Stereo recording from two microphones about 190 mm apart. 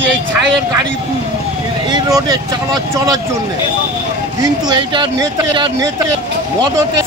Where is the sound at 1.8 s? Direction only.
20° right (ahead or behind).